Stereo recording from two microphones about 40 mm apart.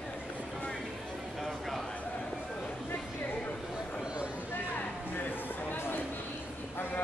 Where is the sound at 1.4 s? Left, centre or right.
Centre.